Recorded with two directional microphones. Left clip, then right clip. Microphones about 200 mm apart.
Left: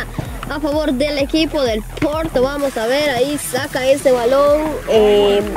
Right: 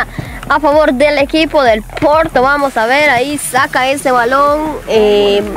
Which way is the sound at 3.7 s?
60° right (ahead or behind).